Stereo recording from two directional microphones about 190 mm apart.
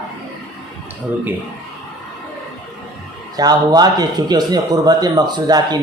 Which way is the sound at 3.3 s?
20° right (ahead or behind).